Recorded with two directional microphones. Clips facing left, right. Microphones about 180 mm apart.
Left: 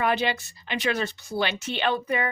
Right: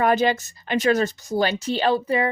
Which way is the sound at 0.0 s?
45° right (ahead or behind).